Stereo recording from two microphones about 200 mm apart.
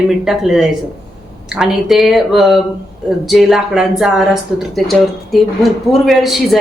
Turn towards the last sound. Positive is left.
turn(degrees=0)  # may be behind; listen again after turning